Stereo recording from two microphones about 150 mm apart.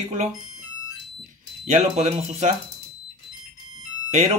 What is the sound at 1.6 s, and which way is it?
Speech, 50° right (ahead or behind).